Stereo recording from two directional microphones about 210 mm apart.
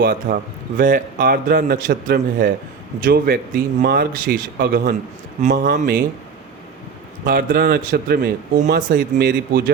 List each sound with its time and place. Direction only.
0.0 s a man's voice: 40° right (ahead or behind)
7.3 s speech: 45° right (ahead or behind)